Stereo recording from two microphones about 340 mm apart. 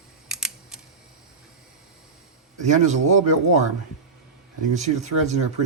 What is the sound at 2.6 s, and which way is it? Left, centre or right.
Speech, centre.